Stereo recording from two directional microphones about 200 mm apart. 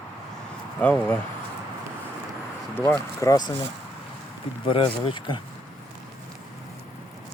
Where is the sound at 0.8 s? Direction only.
10° left (ahead or behind).